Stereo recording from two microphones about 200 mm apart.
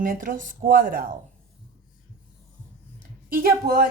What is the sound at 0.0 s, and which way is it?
Speech, 40° right (ahead or behind).